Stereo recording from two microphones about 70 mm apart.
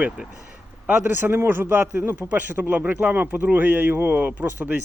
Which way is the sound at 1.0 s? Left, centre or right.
Right.